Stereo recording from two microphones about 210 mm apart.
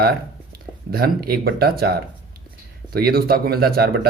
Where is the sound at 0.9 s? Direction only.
45° right (ahead or behind).